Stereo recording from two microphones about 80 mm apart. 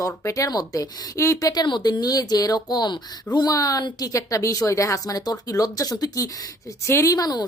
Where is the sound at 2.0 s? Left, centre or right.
Left.